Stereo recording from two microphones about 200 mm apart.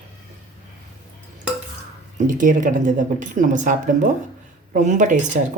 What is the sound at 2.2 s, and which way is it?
Speech, 40° right (ahead or behind).